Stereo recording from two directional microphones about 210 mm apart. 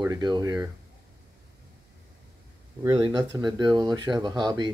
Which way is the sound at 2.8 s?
15° right (ahead or behind).